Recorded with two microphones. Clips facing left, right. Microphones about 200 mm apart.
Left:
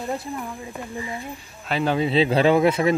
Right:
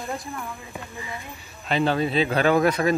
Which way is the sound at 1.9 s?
25° left (ahead or behind).